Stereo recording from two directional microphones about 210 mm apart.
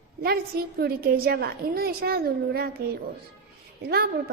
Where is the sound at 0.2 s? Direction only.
50° right (ahead or behind).